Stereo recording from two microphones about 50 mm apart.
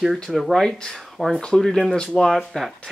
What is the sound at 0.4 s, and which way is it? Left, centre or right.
Speech, centre.